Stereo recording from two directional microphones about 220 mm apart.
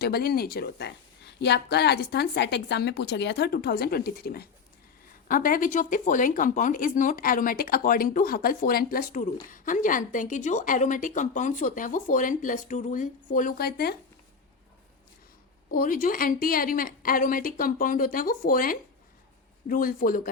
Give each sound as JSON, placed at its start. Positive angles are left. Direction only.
{"t": 0.0, "sound": "speech", "side_deg": 45}
{"t": 15.7, "sound": "speech", "side_deg": 40}